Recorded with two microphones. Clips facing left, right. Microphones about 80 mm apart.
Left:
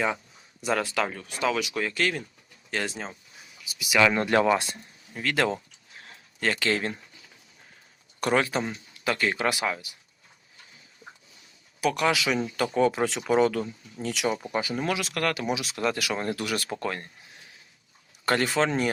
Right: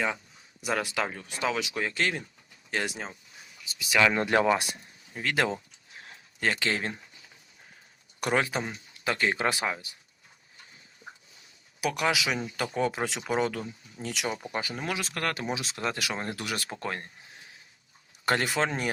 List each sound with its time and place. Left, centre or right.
0.6 s speech: centre
3.7 s speech: centre
4.0 s speech: centre
8.2 s speech: centre
11.8 s speech: centre
15.0 s speech: right
18.3 s speech: centre